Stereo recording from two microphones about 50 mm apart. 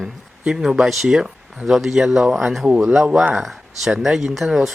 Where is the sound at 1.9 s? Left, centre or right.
Centre.